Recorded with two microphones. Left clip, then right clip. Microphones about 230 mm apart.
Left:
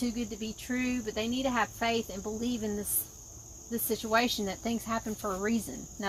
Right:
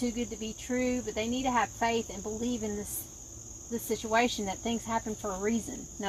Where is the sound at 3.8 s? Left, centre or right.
Left.